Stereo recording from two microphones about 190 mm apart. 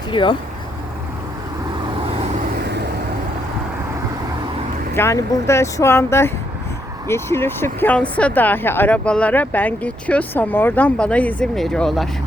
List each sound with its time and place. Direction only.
0.1 s speech: 25° left (ahead or behind)
4.9 s speech: 15° left (ahead or behind)